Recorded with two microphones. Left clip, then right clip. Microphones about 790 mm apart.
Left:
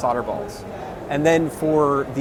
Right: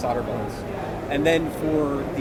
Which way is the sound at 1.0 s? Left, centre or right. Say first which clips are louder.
Left 3 dB; left.